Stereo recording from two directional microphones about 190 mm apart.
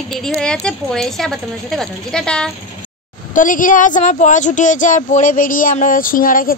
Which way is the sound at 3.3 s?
45° left (ahead or behind).